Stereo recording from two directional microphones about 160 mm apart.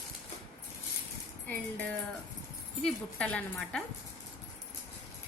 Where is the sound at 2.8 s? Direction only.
10° left (ahead or behind).